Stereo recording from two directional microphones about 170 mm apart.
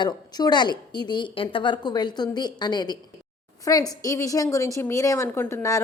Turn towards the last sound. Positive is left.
turn(degrees=15)  # may be behind; listen again after turning